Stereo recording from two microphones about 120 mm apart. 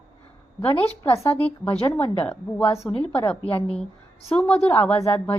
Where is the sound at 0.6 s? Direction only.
50° left (ahead or behind).